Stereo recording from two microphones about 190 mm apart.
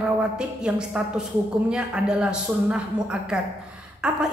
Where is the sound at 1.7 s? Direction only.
5° right (ahead or behind).